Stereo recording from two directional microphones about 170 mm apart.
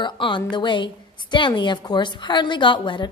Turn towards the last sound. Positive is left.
turn(degrees=30)  # may be behind; listen again after turning